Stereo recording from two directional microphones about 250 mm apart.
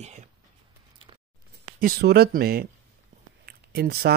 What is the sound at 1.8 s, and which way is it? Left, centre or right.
Speech, right.